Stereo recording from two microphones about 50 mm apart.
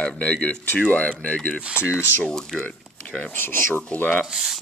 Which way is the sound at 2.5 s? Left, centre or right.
Centre.